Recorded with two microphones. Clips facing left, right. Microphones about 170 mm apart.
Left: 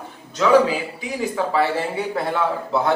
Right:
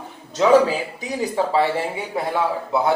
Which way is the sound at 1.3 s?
25° right (ahead or behind).